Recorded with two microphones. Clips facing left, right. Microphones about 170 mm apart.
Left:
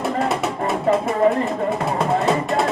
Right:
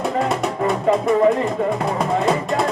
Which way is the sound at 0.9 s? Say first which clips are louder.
Right 2 dB; centre (ahead or behind).